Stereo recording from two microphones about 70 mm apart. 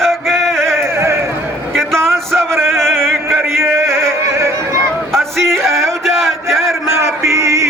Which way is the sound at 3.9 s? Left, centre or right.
Right.